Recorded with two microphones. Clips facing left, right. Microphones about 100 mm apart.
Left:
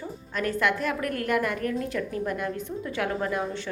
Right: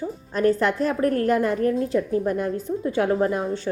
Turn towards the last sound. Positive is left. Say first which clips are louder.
# right 6 dB
turn(degrees=-35)  # may be behind; listen again after turning